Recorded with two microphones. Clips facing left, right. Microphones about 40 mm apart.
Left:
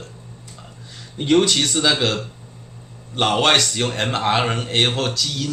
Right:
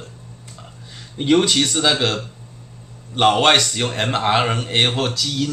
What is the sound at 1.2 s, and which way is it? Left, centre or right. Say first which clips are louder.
A man's voice: right 1 dB; centre.